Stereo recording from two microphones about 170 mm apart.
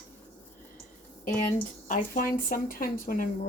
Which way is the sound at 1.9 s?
55° left (ahead or behind).